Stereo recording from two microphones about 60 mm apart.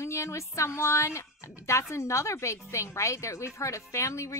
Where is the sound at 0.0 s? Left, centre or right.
Left.